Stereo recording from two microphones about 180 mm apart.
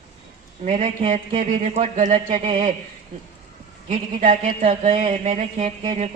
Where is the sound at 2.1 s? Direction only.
30° right (ahead or behind).